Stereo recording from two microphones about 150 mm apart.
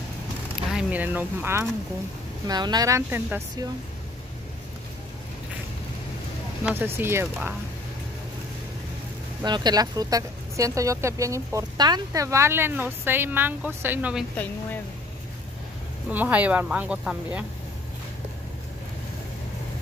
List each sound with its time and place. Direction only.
0.7 s speech: 10° right (ahead or behind)
2.4 s speech: 25° right (ahead or behind)
6.6 s speech: 15° right (ahead or behind)
9.4 s speech: 30° right (ahead or behind); by 14.1 s 15° right (ahead or behind)
14.3 s speech: 10° left (ahead or behind)
16.1 s speech: 10° right (ahead or behind)